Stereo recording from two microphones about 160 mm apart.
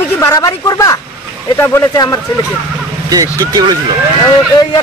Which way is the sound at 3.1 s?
25° right (ahead or behind).